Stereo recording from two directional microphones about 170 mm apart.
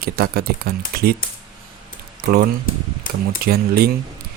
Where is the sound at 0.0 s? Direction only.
65° right (ahead or behind).